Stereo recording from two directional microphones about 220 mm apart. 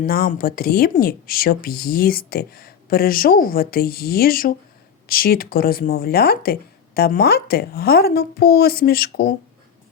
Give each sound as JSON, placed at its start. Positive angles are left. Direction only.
{"t": 0.0, "sound": "a woman's voice", "side_deg": 40}